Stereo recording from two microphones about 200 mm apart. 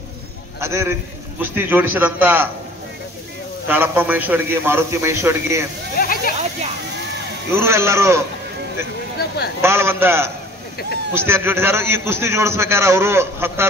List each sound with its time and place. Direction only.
0.6 s a man's voice: 15° right (ahead or behind)
3.6 s a man's voice: 10° right (ahead or behind)
5.9 s a sound: 45° left (ahead or behind)
7.5 s a man's voice: 15° right (ahead or behind)
9.6 s a man's voice: 10° right (ahead or behind)